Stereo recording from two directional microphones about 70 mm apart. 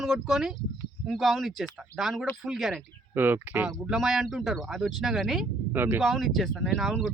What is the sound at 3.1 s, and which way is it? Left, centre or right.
Speech, right.